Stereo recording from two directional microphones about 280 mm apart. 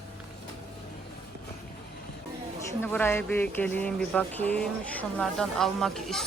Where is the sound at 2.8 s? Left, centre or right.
Centre.